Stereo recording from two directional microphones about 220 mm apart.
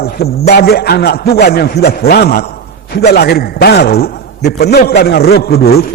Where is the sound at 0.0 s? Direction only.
45° left (ahead or behind).